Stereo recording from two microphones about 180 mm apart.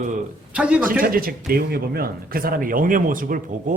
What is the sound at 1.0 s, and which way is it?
Speech, 55° right (ahead or behind).